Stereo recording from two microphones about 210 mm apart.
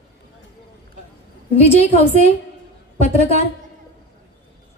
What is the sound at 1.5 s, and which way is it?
Speech, 30° left (ahead or behind).